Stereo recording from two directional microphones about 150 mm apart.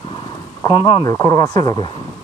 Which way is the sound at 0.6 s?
30° left (ahead or behind).